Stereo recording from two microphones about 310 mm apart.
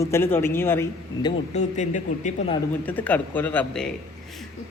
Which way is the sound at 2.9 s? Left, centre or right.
Centre.